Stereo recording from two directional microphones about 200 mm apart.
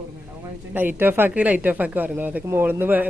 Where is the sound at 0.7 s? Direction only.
10° right (ahead or behind).